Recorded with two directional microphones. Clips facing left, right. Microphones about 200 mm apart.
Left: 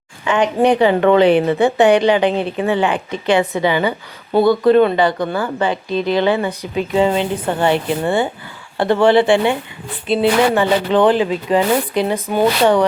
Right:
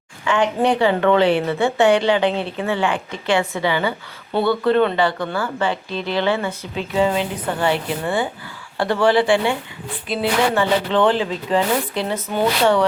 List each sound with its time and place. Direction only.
0.3 s speech: 20° left (ahead or behind)